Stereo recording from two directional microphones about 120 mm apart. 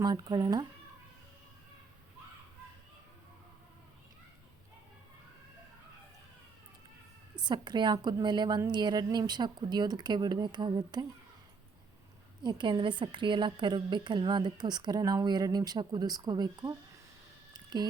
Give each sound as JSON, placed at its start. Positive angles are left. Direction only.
{"t": 0.0, "sound": "a woman's voice", "side_deg": -35}
{"t": 7.3, "sound": "a woman's voice", "side_deg": -40}
{"t": 12.4, "sound": "a woman's voice", "side_deg": -40}